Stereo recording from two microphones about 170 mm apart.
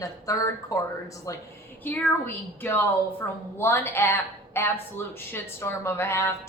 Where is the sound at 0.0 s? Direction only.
20° left (ahead or behind).